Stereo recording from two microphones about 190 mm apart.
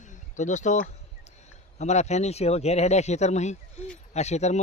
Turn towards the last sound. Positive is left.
turn(degrees=35)  # may be behind; listen again after turning